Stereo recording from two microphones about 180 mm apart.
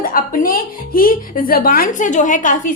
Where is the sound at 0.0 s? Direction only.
50° left (ahead or behind).